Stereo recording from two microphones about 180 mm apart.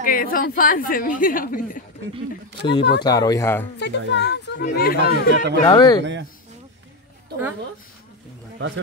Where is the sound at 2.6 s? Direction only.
70° left (ahead or behind).